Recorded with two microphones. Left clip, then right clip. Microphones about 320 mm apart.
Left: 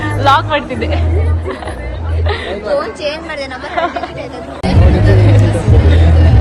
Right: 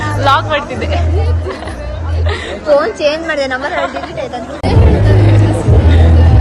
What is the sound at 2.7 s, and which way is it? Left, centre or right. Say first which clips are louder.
Speech: right 8 dB; right.